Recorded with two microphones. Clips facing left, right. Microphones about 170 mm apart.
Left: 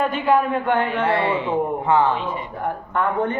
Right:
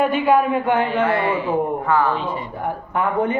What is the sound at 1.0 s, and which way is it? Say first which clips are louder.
Speech: right 1 dB; 30° left (ahead or behind).